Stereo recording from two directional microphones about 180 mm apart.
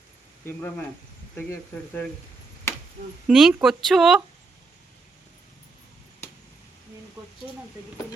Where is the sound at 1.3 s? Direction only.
10° left (ahead or behind).